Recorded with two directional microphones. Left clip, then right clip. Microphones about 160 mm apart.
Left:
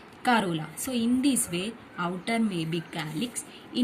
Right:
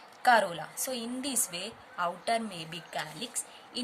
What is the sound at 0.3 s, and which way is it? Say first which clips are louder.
A woman's voice: right 1 dB; 45° right (ahead or behind).